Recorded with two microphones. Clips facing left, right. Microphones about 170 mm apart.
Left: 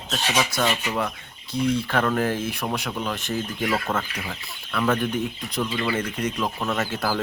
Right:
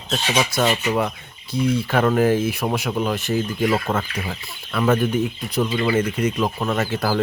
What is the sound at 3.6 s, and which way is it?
Speech, 15° right (ahead or behind).